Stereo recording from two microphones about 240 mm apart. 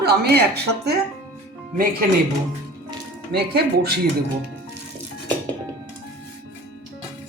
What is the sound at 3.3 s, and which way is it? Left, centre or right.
Speech, right.